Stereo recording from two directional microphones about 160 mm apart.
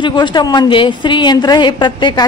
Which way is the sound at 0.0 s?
30° left (ahead or behind).